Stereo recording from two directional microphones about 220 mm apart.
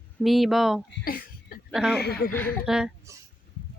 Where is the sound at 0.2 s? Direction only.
Centre (ahead or behind).